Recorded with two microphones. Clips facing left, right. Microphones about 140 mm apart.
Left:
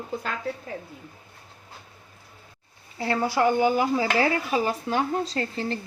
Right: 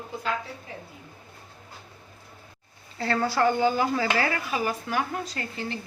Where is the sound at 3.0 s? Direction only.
15° left (ahead or behind).